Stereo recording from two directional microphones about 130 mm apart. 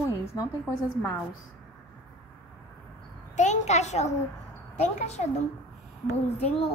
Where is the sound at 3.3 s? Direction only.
65° left (ahead or behind).